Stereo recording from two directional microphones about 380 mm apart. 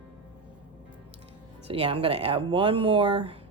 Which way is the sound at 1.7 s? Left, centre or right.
Centre.